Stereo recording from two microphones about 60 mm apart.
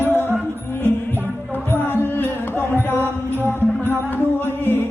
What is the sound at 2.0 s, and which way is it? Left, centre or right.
Music, left.